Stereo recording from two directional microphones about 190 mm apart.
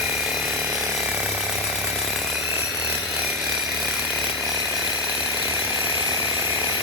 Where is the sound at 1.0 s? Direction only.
5° right (ahead or behind).